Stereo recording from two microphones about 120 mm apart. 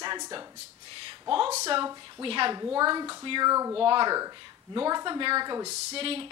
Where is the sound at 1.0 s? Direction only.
45° right (ahead or behind).